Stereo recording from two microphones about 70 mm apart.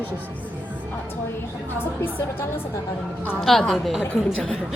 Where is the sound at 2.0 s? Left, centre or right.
Left.